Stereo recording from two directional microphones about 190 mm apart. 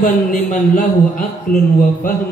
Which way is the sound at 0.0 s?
45° left (ahead or behind).